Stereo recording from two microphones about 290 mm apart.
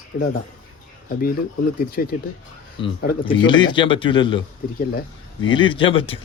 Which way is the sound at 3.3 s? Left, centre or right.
Centre.